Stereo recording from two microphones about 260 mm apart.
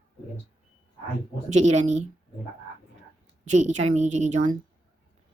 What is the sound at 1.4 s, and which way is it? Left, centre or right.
Speech, right.